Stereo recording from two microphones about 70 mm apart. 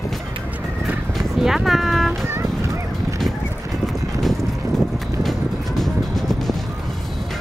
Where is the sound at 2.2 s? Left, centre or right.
Right.